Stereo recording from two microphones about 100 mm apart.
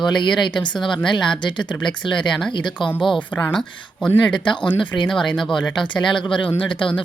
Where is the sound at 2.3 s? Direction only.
5° left (ahead or behind).